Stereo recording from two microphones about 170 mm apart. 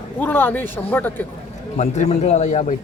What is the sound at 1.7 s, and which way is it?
A man's voice, 40° left (ahead or behind).